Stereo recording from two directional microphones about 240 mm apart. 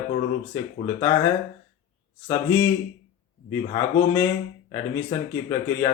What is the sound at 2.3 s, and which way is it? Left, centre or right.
Speech, centre.